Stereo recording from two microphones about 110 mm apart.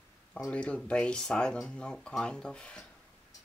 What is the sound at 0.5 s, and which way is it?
Speech, 10° left (ahead or behind).